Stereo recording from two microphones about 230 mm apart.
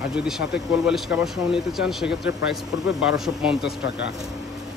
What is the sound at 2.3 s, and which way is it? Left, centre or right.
Speech, centre.